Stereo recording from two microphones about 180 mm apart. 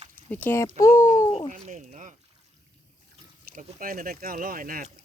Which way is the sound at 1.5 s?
45° right (ahead or behind).